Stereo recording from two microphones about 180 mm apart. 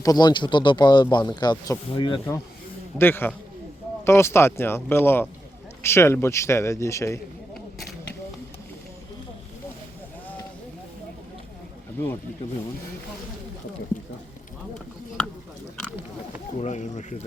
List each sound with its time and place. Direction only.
0.0 s speech: 20° left (ahead or behind)
3.0 s speech: 10° left (ahead or behind)
11.9 s speech: 10° left (ahead or behind)
16.6 s speech: 40° left (ahead or behind)